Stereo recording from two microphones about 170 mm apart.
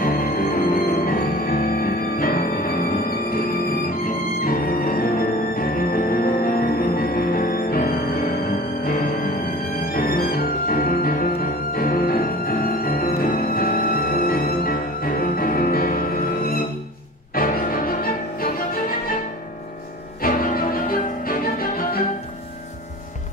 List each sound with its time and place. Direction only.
0.0 s music: 60° left (ahead or behind)
20.2 s music: 55° left (ahead or behind)